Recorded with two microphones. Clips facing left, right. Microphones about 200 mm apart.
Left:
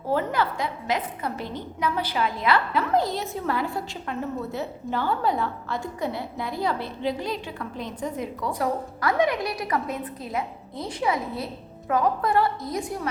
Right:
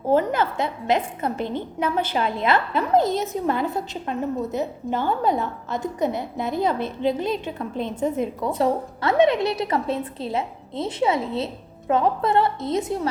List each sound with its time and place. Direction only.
0.1 s a woman's voice: 20° right (ahead or behind)